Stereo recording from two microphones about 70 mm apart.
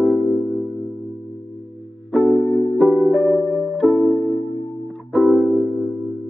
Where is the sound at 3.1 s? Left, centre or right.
Left.